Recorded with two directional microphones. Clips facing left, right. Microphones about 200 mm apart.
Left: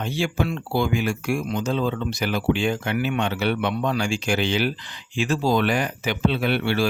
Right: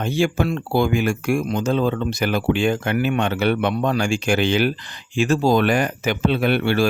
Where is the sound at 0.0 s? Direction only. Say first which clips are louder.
Right 5 dB; 50° right (ahead or behind).